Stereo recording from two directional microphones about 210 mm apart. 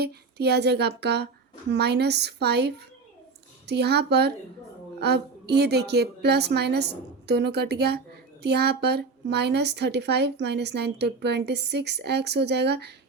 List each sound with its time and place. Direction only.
0.0 s a woman's voice: 50° right (ahead or behind)